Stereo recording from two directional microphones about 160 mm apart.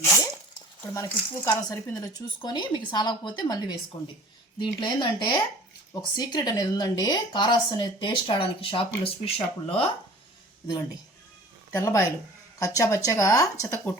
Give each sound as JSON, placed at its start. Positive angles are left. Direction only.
{"t": 0.9, "sound": "a woman's voice", "side_deg": 20}
{"t": 11.7, "sound": "a woman's voice", "side_deg": 20}